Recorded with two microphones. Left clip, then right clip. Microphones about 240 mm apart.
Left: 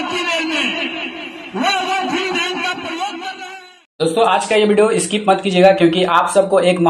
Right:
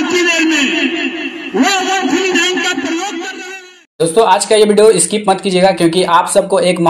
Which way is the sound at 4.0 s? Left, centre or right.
Right.